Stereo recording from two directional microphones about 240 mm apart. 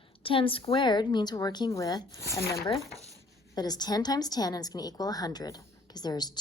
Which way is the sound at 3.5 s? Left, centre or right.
Centre.